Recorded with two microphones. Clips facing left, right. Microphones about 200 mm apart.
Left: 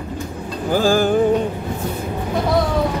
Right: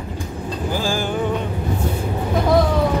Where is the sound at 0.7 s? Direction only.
50° left (ahead or behind).